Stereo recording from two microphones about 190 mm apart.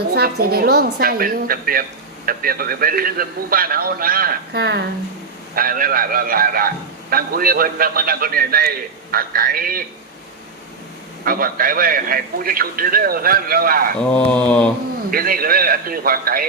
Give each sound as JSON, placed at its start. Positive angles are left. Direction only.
{"t": 0.1, "sound": "a man's voice", "side_deg": -55}
{"t": 11.3, "sound": "a man's voice", "side_deg": -50}
{"t": 14.0, "sound": "mantra", "side_deg": 5}
{"t": 15.1, "sound": "a man's voice", "side_deg": -50}